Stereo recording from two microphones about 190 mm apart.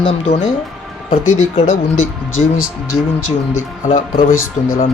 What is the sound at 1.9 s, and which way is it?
Speech, 90° left.